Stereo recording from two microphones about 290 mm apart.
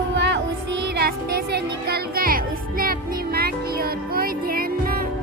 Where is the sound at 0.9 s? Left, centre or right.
Right.